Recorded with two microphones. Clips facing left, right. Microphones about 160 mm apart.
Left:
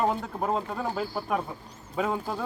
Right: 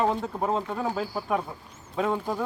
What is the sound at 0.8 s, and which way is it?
Speech, 10° right (ahead or behind).